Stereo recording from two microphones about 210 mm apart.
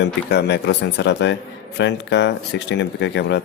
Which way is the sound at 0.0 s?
50° left (ahead or behind).